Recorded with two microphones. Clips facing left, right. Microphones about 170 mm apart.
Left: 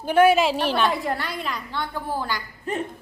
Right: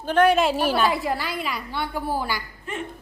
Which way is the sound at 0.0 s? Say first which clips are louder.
Left 1 dB; 10° left (ahead or behind).